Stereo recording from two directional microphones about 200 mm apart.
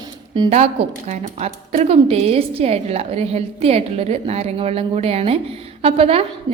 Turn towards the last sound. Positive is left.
turn(degrees=-30)  # may be behind; listen again after turning